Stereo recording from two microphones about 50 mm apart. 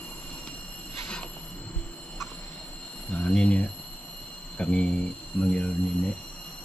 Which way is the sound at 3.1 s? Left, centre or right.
Left.